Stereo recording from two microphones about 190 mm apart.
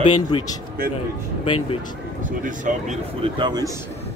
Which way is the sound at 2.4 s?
40° right (ahead or behind).